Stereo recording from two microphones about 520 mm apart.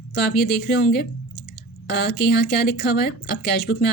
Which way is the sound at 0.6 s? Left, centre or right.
Centre.